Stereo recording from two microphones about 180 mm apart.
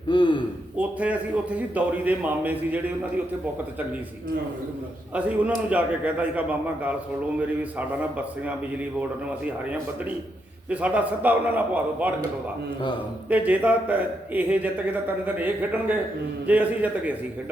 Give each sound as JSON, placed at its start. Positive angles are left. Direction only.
{"t": 0.1, "sound": "speech", "side_deg": 25}
{"t": 0.8, "sound": "a man's voice", "side_deg": -10}
{"t": 5.1, "sound": "a man's voice", "side_deg": -5}
{"t": 10.7, "sound": "a man's voice", "side_deg": -10}
{"t": 13.3, "sound": "a man's voice", "side_deg": -10}